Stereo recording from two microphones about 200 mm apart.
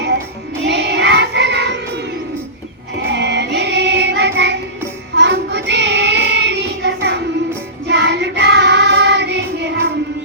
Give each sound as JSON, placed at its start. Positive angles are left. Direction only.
{"t": 0.6, "sound": "child singing", "side_deg": -60}
{"t": 3.0, "sound": "music", "side_deg": -60}
{"t": 5.1, "sound": "child singing", "side_deg": -60}